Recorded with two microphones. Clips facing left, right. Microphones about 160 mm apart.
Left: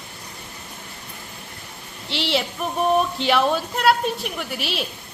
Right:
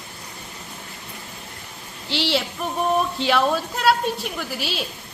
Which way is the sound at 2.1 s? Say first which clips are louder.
Right 2 dB; 60° left (ahead or behind).